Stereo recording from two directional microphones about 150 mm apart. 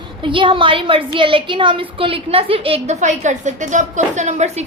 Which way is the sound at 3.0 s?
55° right (ahead or behind).